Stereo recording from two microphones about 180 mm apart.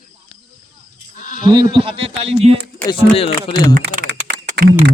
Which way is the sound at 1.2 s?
45° left (ahead or behind).